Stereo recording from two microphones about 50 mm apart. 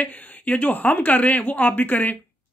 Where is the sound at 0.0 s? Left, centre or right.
Left.